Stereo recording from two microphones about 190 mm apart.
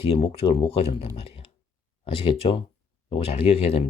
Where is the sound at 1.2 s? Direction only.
30° left (ahead or behind).